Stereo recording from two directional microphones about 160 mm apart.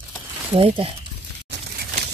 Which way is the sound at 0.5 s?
35° right (ahead or behind).